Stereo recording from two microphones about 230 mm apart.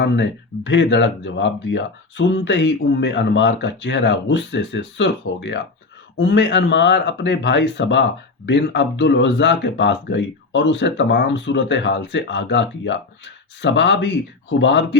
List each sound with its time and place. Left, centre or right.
0.0 s speech: left